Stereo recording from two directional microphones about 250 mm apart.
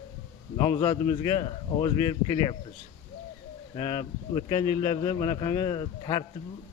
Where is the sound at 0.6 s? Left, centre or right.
Centre.